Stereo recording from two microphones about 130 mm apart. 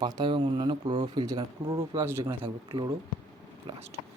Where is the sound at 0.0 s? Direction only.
30° right (ahead or behind).